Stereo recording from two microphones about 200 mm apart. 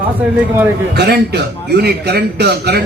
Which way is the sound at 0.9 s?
55° right (ahead or behind).